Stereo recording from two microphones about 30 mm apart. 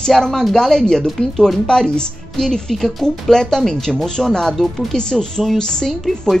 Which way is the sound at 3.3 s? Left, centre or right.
Centre.